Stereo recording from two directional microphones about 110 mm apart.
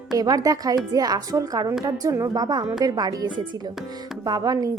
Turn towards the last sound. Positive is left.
turn(degrees=-35)  # may be behind; listen again after turning